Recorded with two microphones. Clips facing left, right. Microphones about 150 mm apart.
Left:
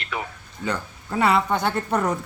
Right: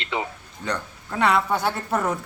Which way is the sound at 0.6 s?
5° left (ahead or behind).